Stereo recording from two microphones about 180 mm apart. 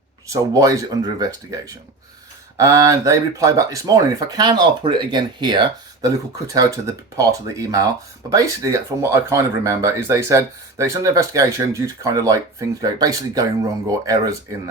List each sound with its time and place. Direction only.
0.3 s speech: 20° right (ahead or behind)